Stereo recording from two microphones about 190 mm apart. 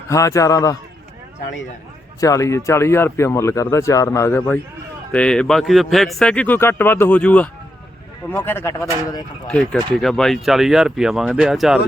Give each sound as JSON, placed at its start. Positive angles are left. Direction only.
{"t": 0.1, "sound": "speech", "side_deg": 15}
{"t": 2.2, "sound": "speech", "side_deg": 15}
{"t": 9.5, "sound": "speech", "side_deg": 5}